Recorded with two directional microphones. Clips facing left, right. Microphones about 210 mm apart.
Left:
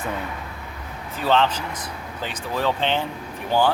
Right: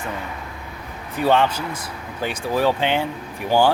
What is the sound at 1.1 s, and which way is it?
Speech, 10° right (ahead or behind).